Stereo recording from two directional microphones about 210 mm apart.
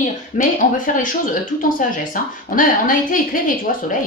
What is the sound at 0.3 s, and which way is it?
Speech, 40° left (ahead or behind).